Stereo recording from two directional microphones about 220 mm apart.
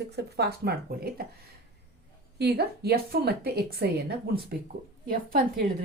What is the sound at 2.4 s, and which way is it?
Speech, 45° right (ahead or behind).